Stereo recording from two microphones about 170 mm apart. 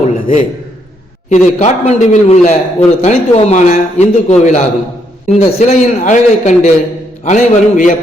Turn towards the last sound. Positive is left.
turn(degrees=50)  # may be behind; listen again after turning